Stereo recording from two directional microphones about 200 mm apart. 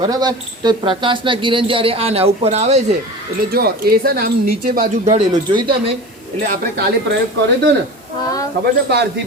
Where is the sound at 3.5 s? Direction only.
50° right (ahead or behind).